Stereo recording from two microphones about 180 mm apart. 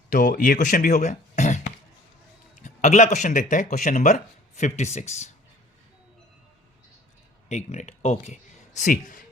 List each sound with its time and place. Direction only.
0.1 s speech: 50° left (ahead or behind)
7.4 s speech: 40° left (ahead or behind)